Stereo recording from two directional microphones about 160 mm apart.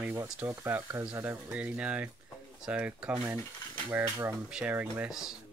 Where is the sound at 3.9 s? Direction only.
20° right (ahead or behind).